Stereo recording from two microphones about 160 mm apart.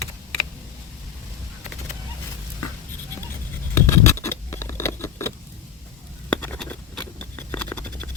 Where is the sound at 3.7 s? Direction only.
15° left (ahead or behind).